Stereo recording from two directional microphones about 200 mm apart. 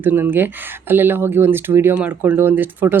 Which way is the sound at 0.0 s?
10° right (ahead or behind).